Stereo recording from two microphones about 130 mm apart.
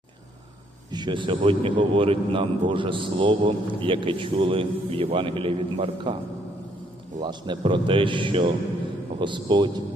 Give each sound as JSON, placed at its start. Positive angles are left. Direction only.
{"t": 0.9, "sound": "a man's voice", "side_deg": -35}
{"t": 7.2, "sound": "a man's voice", "side_deg": -35}